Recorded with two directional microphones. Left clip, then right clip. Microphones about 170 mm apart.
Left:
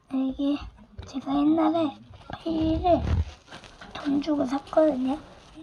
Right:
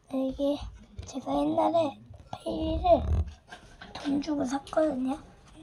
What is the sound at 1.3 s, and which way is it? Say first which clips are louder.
Speech: left 2 dB; 25° left (ahead or behind).